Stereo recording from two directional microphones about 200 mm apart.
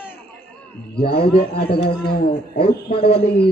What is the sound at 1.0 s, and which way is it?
A man's voice, 50° left (ahead or behind).